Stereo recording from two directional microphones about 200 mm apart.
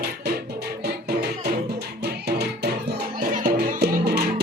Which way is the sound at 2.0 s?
55° right (ahead or behind).